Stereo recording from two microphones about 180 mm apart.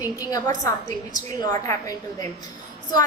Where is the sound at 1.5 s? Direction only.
20° left (ahead or behind).